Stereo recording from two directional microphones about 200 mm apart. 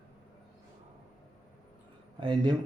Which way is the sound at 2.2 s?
25° right (ahead or behind).